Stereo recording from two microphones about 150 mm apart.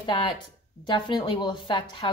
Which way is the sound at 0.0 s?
30° left (ahead or behind).